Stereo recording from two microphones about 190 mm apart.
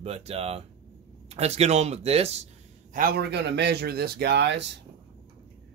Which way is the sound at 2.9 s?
55° right (ahead or behind).